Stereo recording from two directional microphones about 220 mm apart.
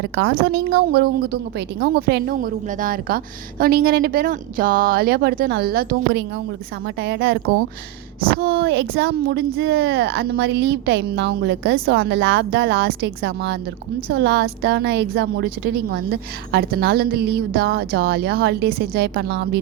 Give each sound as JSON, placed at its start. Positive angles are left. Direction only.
{"t": 0.0, "sound": "a woman's voice", "side_deg": -45}
{"t": 8.4, "sound": "a woman's voice", "side_deg": -45}